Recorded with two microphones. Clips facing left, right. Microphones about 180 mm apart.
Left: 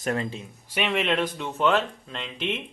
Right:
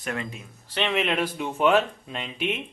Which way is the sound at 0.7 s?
5° left (ahead or behind).